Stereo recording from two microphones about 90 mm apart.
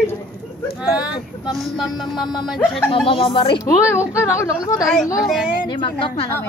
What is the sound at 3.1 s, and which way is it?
Speech, 80° left.